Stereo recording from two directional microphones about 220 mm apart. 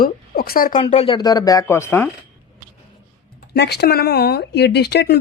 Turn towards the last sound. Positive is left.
turn(degrees=45)  # may be behind; listen again after turning